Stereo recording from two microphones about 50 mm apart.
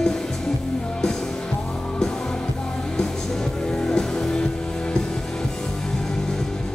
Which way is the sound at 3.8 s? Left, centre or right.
Centre.